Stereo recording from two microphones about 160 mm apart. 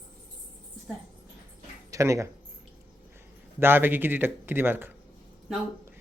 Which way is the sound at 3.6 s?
15° right (ahead or behind).